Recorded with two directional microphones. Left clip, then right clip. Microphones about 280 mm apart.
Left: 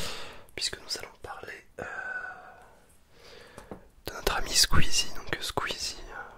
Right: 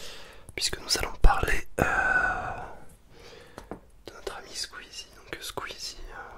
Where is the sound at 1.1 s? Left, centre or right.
Right.